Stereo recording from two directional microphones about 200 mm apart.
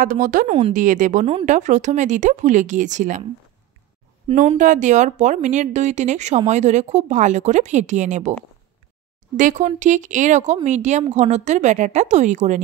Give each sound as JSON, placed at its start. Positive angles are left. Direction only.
{"t": 0.0, "sound": "a woman's voice", "side_deg": -40}
{"t": 4.3, "sound": "a woman's voice", "side_deg": -35}
{"t": 9.4, "sound": "a woman's voice", "side_deg": -40}